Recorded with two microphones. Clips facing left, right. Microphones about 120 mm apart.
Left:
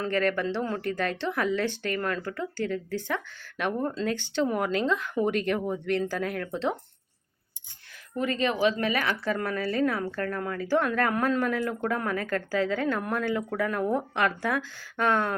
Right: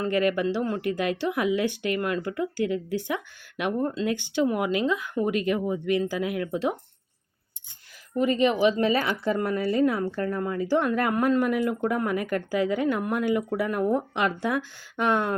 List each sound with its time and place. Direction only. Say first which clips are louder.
0.0 s speech: right 3 dB; 10° right (ahead or behind)
4.1 s speech: right 2 dB; 15° right (ahead or behind)
8.1 s speech: right 5 dB; 15° right (ahead or behind)
8.8 s speech: right 4 dB; 30° right (ahead or behind)